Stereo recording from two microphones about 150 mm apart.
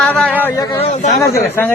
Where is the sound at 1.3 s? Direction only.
15° left (ahead or behind).